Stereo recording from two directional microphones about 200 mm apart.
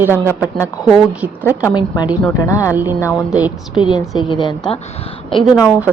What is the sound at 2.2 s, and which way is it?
Speech, 15° left (ahead or behind).